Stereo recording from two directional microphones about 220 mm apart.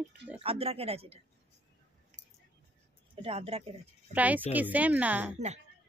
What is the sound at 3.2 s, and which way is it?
Speech, 25° right (ahead or behind).